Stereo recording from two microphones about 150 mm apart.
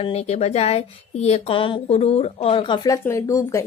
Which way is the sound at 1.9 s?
45° left (ahead or behind).